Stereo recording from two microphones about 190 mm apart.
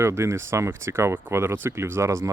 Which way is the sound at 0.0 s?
15° right (ahead or behind).